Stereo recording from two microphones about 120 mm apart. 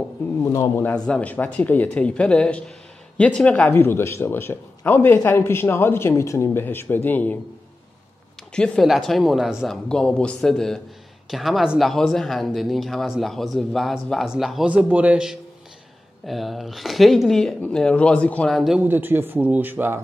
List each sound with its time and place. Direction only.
0.4 s speech: 25° left (ahead or behind)
0.9 s speech: 5° left (ahead or behind)
8.5 s speech: 5° left (ahead or behind)
9.8 s speech: 10° left (ahead or behind)
18.9 s speech: 15° right (ahead or behind)